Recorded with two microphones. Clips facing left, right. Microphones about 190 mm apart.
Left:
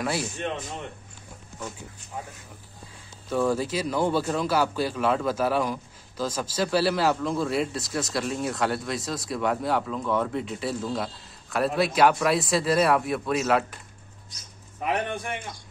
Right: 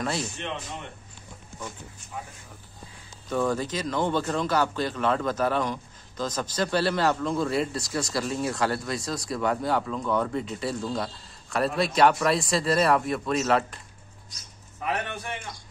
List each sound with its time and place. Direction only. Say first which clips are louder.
0.0 s speech: left 1 dB; 5° left (ahead or behind)
3.3 s speech: left 2 dB; 5° left (ahead or behind)
14.8 s a man's voice: left 3 dB; 20° left (ahead or behind)